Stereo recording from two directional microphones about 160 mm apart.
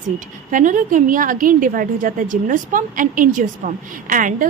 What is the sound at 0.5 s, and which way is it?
A woman's voice, 55° right (ahead or behind).